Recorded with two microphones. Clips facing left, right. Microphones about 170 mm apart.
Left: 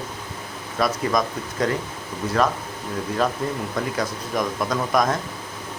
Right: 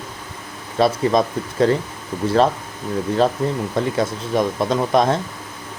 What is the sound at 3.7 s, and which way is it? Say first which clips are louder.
Speech: right 5 dB; 25° right (ahead or behind).